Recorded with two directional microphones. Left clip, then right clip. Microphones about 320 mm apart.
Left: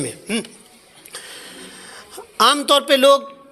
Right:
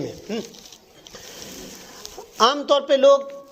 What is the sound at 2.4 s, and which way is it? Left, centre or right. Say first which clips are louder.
Speech: left 3 dB; left.